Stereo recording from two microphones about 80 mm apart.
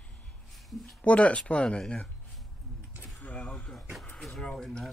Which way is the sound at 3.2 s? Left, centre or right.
Centre.